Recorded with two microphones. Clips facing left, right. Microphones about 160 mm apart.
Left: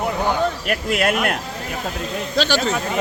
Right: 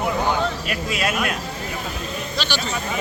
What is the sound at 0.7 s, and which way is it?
Speech, 60° left (ahead or behind).